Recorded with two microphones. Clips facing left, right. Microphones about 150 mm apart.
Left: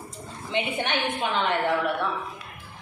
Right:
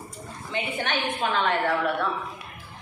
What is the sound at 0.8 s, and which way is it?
Speech, 20° left (ahead or behind).